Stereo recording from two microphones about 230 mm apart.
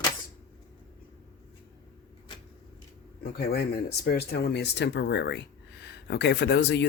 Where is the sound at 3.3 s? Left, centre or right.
Left.